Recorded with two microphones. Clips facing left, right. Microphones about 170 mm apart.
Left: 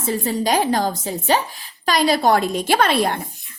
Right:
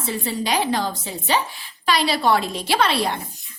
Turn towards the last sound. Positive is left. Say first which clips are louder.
# left 3 dB
turn(degrees=50)  # may be behind; listen again after turning